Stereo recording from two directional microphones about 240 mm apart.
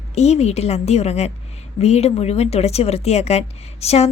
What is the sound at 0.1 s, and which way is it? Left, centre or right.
A woman's voice, left.